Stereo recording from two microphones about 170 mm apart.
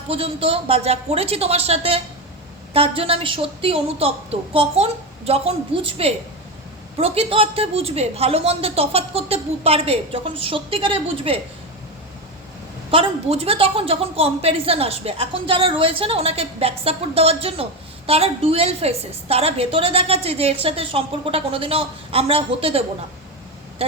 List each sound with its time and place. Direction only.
0.1 s a woman's voice: 35° right (ahead or behind)
12.9 s a woman's voice: 35° right (ahead or behind)